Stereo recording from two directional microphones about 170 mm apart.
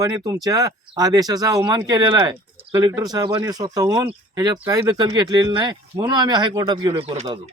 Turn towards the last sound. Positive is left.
turn(degrees=-35)  # may be behind; listen again after turning